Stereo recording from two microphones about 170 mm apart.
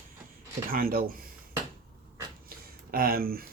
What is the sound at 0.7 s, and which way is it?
Speech, 55° right (ahead or behind).